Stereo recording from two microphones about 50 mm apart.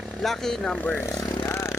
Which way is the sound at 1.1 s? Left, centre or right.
Left.